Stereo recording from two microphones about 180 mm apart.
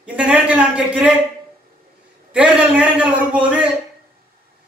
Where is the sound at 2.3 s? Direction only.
5° right (ahead or behind).